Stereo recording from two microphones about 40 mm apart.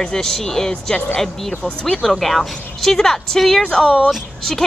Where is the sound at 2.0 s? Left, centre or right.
Centre.